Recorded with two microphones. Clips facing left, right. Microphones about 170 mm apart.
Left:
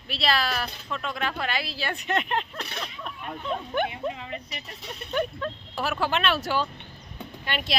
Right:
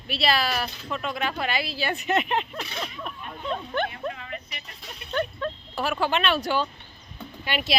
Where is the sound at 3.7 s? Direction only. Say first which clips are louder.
Left 3 dB; 15° left (ahead or behind).